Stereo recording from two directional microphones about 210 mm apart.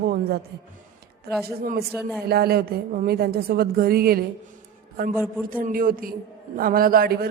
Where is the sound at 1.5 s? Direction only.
50° right (ahead or behind).